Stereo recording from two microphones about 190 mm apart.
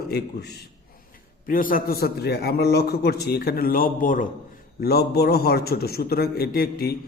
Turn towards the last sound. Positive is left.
turn(degrees=55)  # may be behind; listen again after turning